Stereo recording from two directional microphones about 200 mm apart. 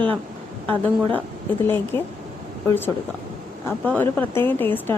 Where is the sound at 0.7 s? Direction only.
10° left (ahead or behind).